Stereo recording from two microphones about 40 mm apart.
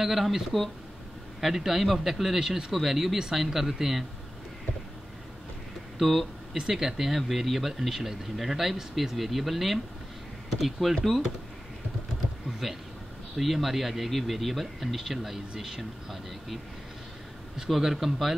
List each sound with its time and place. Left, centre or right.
0.0 s a man's voice: centre
5.9 s speech: centre
12.4 s a sound: centre
13.4 s speech: centre
17.6 s speech: centre